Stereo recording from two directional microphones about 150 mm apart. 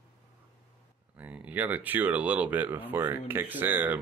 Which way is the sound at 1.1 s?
10° right (ahead or behind).